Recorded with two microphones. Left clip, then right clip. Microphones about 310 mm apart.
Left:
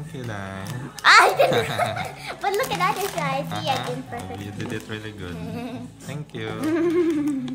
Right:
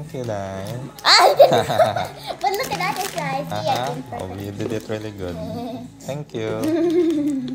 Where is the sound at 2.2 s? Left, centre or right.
Left.